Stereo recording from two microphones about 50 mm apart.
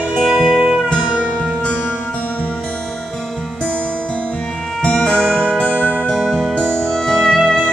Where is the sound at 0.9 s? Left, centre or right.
Centre.